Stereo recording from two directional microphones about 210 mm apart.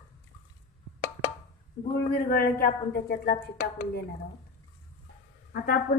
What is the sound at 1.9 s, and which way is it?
Speech, 45° left (ahead or behind).